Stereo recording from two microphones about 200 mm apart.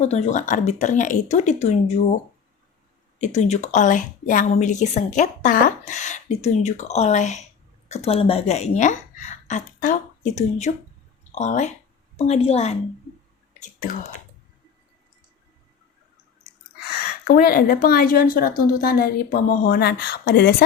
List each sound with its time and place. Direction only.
0.0 s a woman's voice: 35° left (ahead or behind)
3.2 s a woman's voice: 35° left (ahead or behind)
11.2 s a sound: 35° left (ahead or behind)
12.1 s a woman's voice: 30° left (ahead or behind)
13.5 s whispering: 40° left (ahead or behind)
17.0 s speech: 45° left (ahead or behind)